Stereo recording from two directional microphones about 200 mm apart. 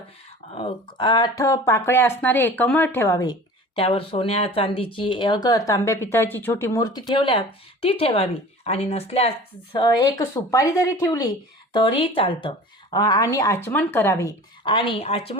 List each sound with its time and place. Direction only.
0.5 s speech: 25° left (ahead or behind)
3.8 s a woman's voice: 25° left (ahead or behind)